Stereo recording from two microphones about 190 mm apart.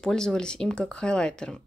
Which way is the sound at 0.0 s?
5° left (ahead or behind).